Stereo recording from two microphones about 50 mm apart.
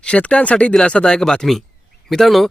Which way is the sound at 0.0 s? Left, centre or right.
Left.